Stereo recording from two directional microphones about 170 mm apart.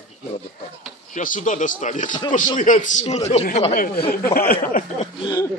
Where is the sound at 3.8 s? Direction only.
60° left (ahead or behind).